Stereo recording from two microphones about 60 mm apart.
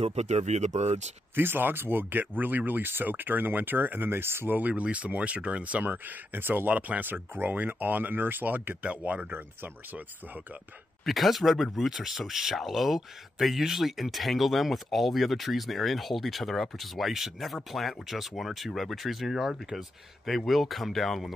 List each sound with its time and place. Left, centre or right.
1.3 s speech: right
11.1 s speech: centre